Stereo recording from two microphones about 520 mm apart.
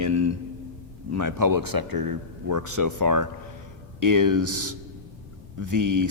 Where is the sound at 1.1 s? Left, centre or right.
Right.